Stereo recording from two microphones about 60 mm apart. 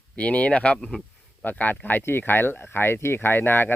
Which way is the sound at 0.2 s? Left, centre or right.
Left.